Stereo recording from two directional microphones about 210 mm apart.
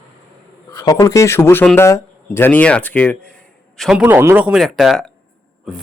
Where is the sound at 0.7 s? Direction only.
15° left (ahead or behind).